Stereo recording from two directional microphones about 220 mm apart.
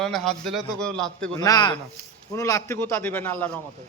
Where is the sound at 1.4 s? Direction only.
20° left (ahead or behind).